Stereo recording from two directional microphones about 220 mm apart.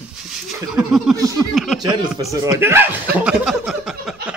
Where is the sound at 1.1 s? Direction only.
15° right (ahead or behind).